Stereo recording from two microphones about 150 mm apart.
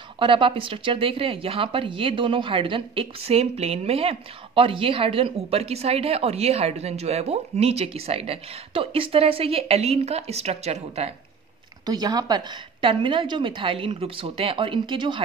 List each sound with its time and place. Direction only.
0.2 s speech: 35° right (ahead or behind)
11.8 s speech: 25° right (ahead or behind)